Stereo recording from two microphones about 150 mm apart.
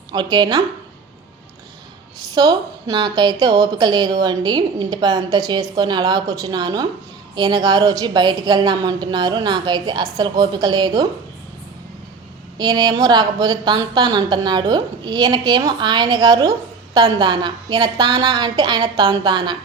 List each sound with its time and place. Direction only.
0.1 s a woman's voice: 30° right (ahead or behind)
2.3 s a woman's voice: 25° right (ahead or behind)
12.5 s a woman's voice: 30° right (ahead or behind)